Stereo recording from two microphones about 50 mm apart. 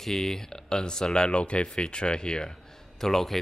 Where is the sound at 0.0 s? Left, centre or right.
Centre.